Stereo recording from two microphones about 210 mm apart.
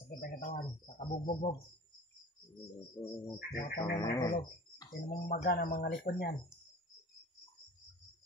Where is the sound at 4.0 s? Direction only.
15° left (ahead or behind).